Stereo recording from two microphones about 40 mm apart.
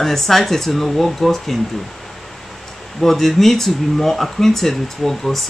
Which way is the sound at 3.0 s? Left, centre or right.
Centre.